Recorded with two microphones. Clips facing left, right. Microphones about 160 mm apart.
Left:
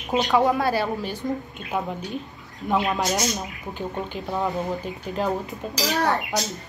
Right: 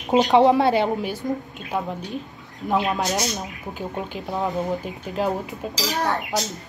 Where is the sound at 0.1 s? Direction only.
20° right (ahead or behind).